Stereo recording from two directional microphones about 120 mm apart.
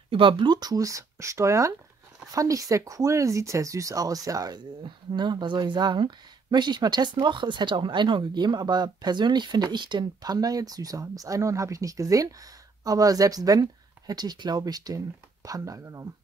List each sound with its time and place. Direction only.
0.1 s speech: 45° right (ahead or behind); by 16.1 s 25° right (ahead or behind)